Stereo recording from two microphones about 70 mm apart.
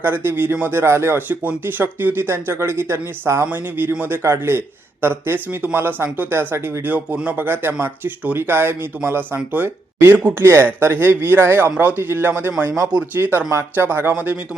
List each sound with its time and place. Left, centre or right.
0.0 s speech: right
1.3 s speech: right
10.4 s speech: right